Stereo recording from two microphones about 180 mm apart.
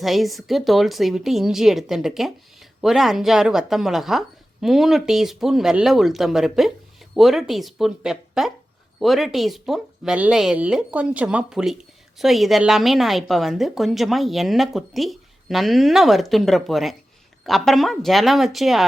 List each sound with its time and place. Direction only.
0.0 s a woman's voice: centre (ahead or behind)